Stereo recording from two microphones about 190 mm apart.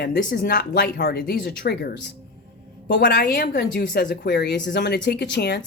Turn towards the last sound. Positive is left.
turn(degrees=60)  # may be behind; listen again after turning